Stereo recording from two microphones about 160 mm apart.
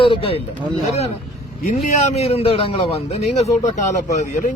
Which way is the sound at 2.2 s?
40° left (ahead or behind).